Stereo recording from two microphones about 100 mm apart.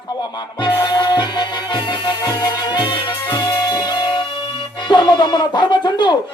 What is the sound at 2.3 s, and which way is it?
Music, 35° left (ahead or behind).